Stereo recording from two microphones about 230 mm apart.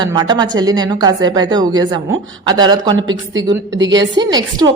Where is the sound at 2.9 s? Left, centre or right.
Right.